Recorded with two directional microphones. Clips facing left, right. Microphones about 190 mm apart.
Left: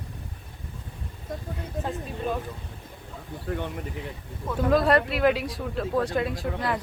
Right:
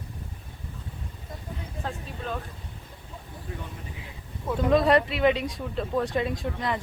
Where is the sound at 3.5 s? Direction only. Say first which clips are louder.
Left 9 dB; 80° left.